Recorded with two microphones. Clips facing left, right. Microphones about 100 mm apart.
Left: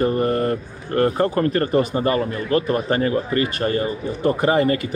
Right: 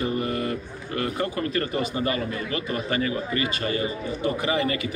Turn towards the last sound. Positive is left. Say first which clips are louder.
# left 7 dB
turn(degrees=45)  # may be behind; listen again after turning